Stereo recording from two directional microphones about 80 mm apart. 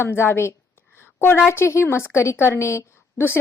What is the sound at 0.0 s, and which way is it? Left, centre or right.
A woman's voice, left.